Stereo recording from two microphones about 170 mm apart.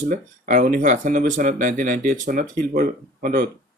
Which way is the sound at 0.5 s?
50° right (ahead or behind).